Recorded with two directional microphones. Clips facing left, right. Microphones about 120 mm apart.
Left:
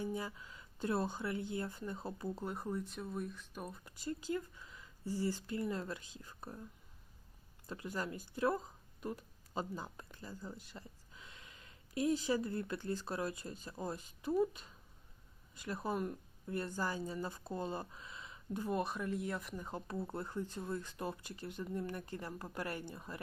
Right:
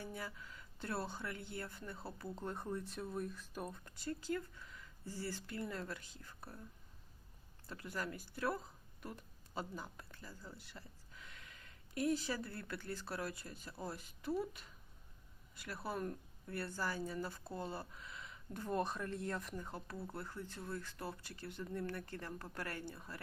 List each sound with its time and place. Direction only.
0.0 s speech: 15° left (ahead or behind)
4.0 s speech: 15° left (ahead or behind)
7.7 s speech: 20° left (ahead or behind)
18.8 s speech: 5° left (ahead or behind)
19.6 s speech: 20° left (ahead or behind)